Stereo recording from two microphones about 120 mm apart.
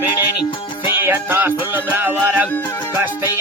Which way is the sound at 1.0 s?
15° right (ahead or behind).